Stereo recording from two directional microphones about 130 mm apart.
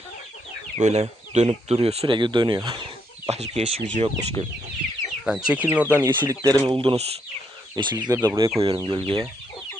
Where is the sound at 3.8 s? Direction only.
60° right (ahead or behind).